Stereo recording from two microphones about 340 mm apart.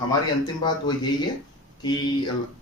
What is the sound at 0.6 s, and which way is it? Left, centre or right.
Speech, centre.